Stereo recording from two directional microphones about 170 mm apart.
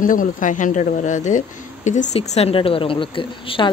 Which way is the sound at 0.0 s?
50° left (ahead or behind).